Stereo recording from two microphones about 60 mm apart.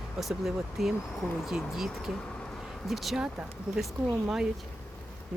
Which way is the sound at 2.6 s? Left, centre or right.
Centre.